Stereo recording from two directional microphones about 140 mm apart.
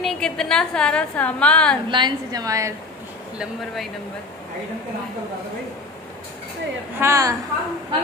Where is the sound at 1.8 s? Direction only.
30° right (ahead or behind).